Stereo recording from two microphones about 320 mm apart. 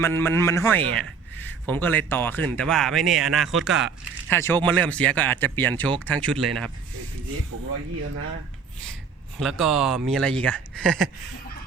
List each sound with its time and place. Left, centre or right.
0.0 s a man's voice: centre
9.4 s a man's voice: centre